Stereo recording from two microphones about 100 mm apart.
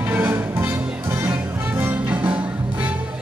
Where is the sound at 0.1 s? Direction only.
20° right (ahead or behind).